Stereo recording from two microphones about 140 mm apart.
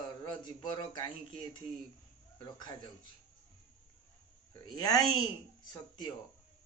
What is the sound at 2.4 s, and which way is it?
Speech, 30° left (ahead or behind).